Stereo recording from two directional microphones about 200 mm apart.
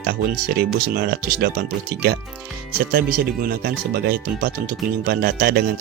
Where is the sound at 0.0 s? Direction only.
50° right (ahead or behind).